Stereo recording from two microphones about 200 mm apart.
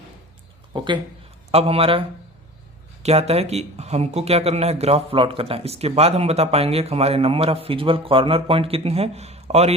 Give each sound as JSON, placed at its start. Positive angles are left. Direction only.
{"t": 1.5, "sound": "a man's voice", "side_deg": -30}